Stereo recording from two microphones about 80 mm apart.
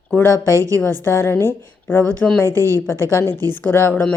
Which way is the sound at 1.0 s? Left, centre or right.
Left.